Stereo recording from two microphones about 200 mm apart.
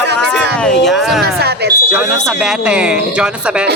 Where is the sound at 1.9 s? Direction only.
5° right (ahead or behind).